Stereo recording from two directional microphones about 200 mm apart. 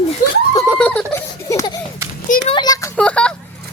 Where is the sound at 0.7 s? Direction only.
5° left (ahead or behind).